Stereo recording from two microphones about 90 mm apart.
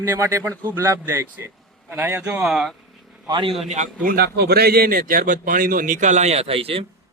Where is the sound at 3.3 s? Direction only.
65° right (ahead or behind).